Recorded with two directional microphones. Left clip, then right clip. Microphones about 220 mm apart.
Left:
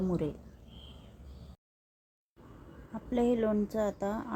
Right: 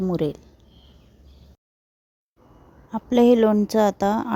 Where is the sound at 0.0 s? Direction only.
30° right (ahead or behind).